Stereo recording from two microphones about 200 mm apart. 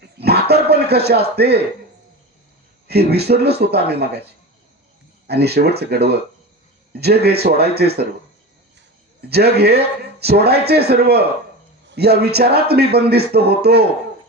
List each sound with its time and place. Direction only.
0.0 s a sound: 55° right (ahead or behind)
2.8 s speech: 55° right (ahead or behind)
5.3 s speech: 55° right (ahead or behind)
9.3 s speech: 55° right (ahead or behind)